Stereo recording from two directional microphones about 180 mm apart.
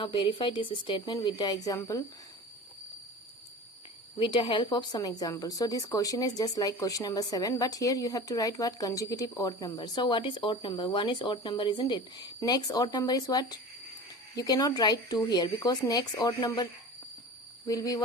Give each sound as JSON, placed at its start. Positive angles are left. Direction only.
{"t": 0.0, "sound": "speech", "side_deg": 25}
{"t": 4.2, "sound": "speech", "side_deg": 30}
{"t": 17.7, "sound": "speech", "side_deg": 20}